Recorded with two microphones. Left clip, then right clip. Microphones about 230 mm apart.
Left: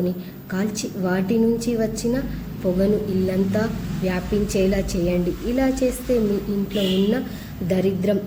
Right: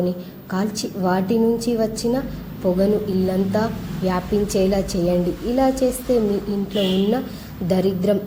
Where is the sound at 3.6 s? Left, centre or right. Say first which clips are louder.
Right 2 dB; centre.